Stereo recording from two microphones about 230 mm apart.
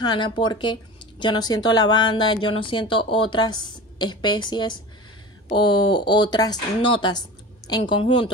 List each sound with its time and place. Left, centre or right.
0.0 s speech: centre